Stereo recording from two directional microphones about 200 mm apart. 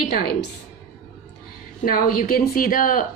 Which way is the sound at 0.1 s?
50° left (ahead or behind).